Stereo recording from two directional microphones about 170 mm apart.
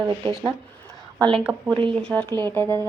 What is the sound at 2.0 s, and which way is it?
Speech, 5° left (ahead or behind).